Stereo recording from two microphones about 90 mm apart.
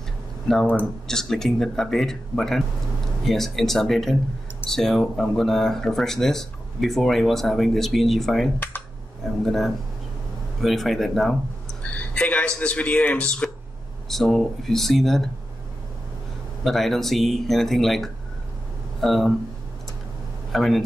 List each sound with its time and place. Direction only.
1.0 s speech: 5° left (ahead or behind)
11.8 s a man's voice: 15° left (ahead or behind)
16.6 s speech: centre (ahead or behind)
20.5 s speech: centre (ahead or behind)